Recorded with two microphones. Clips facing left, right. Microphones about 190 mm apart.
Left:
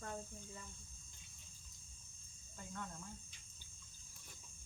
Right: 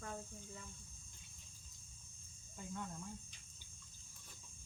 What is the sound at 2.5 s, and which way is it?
Cricket, 15° right (ahead or behind).